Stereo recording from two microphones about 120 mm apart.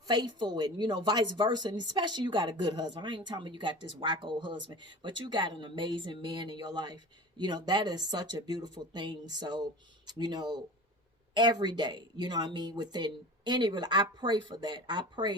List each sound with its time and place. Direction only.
0.0 s a woman's voice: 35° right (ahead or behind)